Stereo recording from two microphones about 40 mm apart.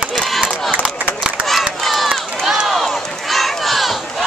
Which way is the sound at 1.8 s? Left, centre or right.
Centre.